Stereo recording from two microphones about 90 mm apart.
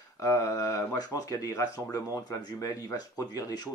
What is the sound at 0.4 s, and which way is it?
Speech, 50° left (ahead or behind).